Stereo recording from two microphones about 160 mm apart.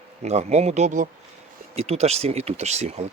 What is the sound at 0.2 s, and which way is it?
Speech, 45° right (ahead or behind).